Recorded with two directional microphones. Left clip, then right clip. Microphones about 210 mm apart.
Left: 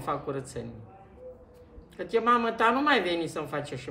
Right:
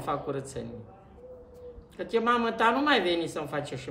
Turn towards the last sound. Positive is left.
turn(degrees=0)  # may be behind; listen again after turning